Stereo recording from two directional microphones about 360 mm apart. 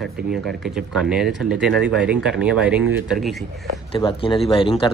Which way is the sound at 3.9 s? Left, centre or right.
Centre.